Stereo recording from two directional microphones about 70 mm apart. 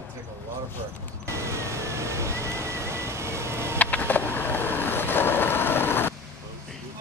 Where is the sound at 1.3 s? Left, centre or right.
Right.